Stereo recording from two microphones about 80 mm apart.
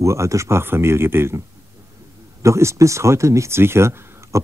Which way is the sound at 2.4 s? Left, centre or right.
Right.